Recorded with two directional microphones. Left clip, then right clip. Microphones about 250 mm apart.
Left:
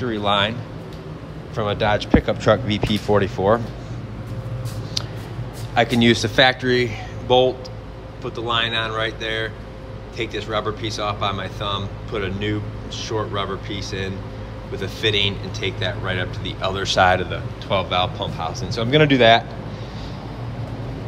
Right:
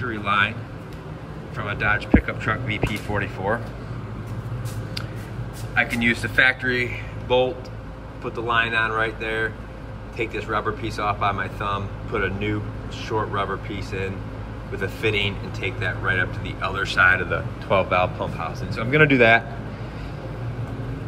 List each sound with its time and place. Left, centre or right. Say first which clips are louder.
0.0 s speech: left 2 dB; centre
1.6 s speech: left 3 dB; centre
5.8 s speech: left 4 dB; centre